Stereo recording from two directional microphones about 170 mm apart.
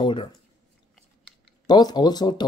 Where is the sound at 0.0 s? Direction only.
30° left (ahead or behind).